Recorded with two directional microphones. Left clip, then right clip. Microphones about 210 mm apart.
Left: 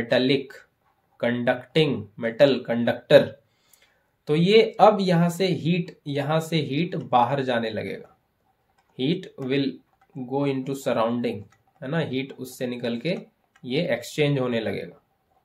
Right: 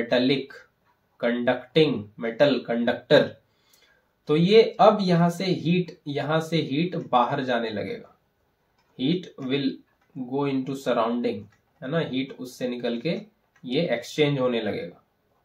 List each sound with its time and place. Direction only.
1.2 s speech: 45° left (ahead or behind)
4.3 s speech: 45° left (ahead or behind)
8.9 s speech: 45° left (ahead or behind)